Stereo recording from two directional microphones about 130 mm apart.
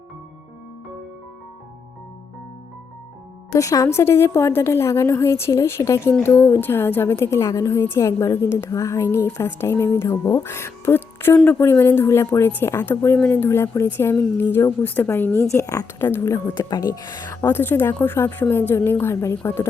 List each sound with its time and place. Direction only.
3.5 s a woman's voice: 25° left (ahead or behind)
16.6 s speech: 30° left (ahead or behind)
17.5 s speech: 15° left (ahead or behind)